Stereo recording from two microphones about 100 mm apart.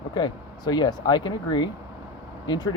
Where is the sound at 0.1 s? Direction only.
45° left (ahead or behind).